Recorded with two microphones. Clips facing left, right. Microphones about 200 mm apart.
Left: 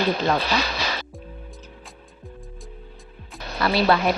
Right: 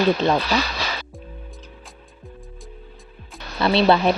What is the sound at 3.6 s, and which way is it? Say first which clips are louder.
Speech: right 3 dB; 25° right (ahead or behind).